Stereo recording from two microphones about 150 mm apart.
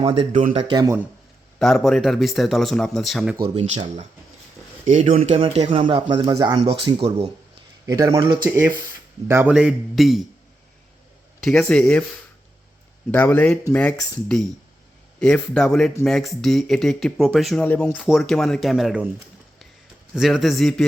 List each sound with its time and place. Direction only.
0.0 s speech: 40° right (ahead or behind)
0.5 s speech: 30° right (ahead or behind)
1.5 s speech: 5° left (ahead or behind)
3.3 s speech: 30° right (ahead or behind)
4.9 s speech: 60° right (ahead or behind); by 6.6 s 25° right (ahead or behind)
6.6 s speech: 40° right (ahead or behind)
7.9 s a man's voice: 25° right (ahead or behind)
9.5 s speech: 5° right (ahead or behind)
11.4 s speech: 5° left (ahead or behind)
13.1 s speech: 10° left (ahead or behind)
17.7 s speech: 10° left (ahead or behind)
17.9 s speech: 5° right (ahead or behind)
20.1 s speech: centre (ahead or behind)